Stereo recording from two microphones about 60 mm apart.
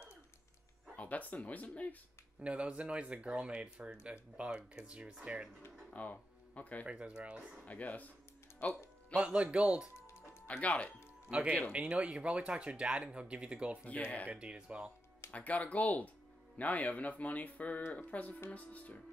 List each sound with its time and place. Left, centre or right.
0.9 s speech: left
2.4 s speech: centre
5.9 s speech: left
6.9 s speech: centre
7.6 s speech: left
9.1 s speech: centre
9.9 s music: left
10.4 s speech: left
11.3 s speech: centre
14.0 s speech: centre
14.3 s speech: centre
15.3 s speech: left